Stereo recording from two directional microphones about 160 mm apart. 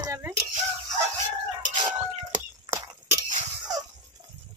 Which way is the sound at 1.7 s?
55° right (ahead or behind).